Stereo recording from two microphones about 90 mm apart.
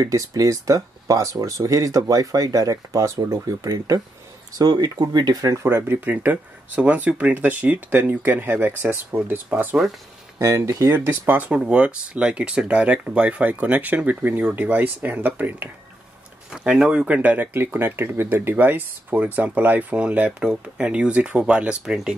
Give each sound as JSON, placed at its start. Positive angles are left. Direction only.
{"t": 0.0, "sound": "speech", "side_deg": -40}
{"t": 10.4, "sound": "speech", "side_deg": -35}
{"t": 11.2, "sound": "speech", "side_deg": -20}
{"t": 16.5, "sound": "speech", "side_deg": -5}